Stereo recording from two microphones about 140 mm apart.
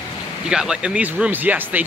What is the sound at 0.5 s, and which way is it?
Speech, 5° right (ahead or behind).